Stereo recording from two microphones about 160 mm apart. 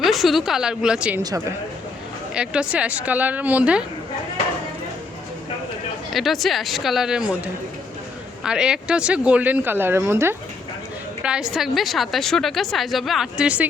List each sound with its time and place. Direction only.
0.0 s a woman's voice: centre (ahead or behind)
1.2 s speech: 25° right (ahead or behind)
2.3 s a woman's voice: 5° right (ahead or behind)
6.1 s a woman's voice: centre (ahead or behind)